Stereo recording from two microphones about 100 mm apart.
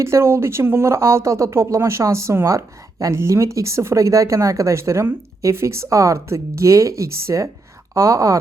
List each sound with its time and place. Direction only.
0.0 s speech: 25° right (ahead or behind)